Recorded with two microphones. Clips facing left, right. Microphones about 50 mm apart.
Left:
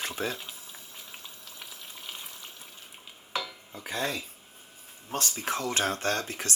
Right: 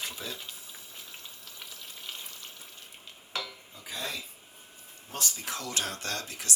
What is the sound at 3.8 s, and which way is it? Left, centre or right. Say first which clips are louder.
Speech: left 6 dB; left.